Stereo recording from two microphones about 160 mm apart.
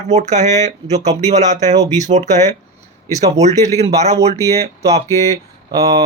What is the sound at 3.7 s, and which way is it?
Speech, 45° right (ahead or behind).